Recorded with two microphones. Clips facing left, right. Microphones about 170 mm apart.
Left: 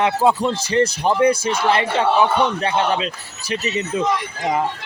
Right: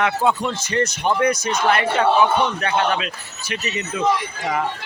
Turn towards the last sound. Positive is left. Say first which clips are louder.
# left 4 dB
turn(degrees=30)  # may be behind; listen again after turning